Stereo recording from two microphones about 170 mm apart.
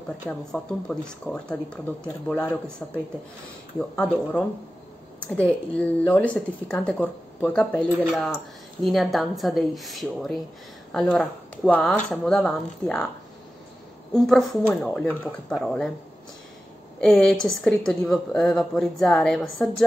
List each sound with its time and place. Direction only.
0.3 s a woman's voice: 5° left (ahead or behind)
3.9 s a woman's voice: 10° left (ahead or behind)
14.1 s a woman's voice: centre (ahead or behind)
17.0 s a woman's voice: centre (ahead or behind)